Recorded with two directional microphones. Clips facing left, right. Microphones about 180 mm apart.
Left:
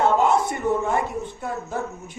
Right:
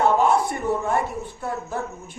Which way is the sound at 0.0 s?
20° left (ahead or behind).